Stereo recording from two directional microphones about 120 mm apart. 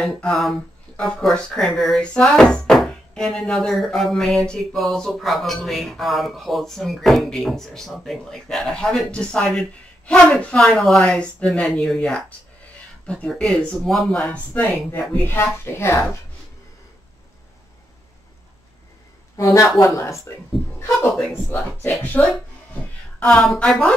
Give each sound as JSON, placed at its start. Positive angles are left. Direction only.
{"t": 0.0, "sound": "speech", "side_deg": 5}
{"t": 19.3, "sound": "speech", "side_deg": 25}
{"t": 21.5, "sound": "speech", "side_deg": 15}
{"t": 22.2, "sound": "speech", "side_deg": 5}